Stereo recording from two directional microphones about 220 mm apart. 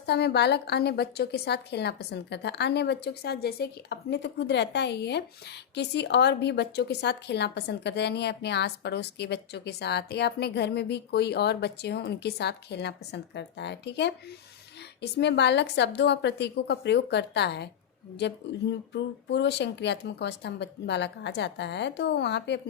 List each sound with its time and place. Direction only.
0.0 s a woman's voice: 50° left (ahead or behind)